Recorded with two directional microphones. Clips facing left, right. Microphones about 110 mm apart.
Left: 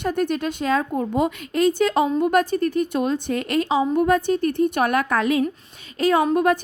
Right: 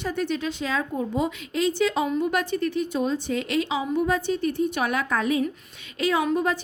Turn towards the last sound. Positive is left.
turn(degrees=60)  # may be behind; listen again after turning